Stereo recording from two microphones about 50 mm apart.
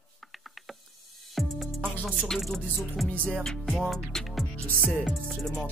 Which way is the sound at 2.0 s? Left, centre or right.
Centre.